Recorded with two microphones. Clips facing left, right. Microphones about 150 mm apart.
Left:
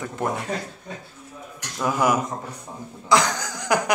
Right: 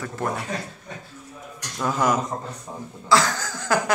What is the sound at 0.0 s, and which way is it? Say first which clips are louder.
Speech: left 1 dB; 20° left (ahead or behind).